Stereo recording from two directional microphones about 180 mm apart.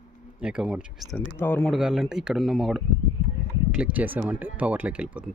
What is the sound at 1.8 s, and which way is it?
Speech, 5° right (ahead or behind).